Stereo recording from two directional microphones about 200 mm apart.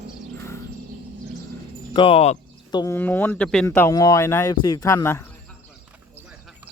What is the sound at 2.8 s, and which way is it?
Speech, 15° left (ahead or behind).